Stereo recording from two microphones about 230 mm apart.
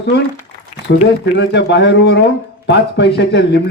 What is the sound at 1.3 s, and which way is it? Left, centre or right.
Speech, left.